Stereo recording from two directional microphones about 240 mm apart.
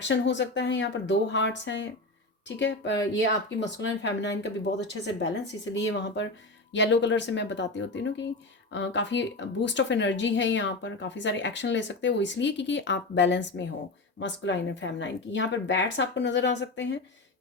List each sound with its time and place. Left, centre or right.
0.0 s speech: left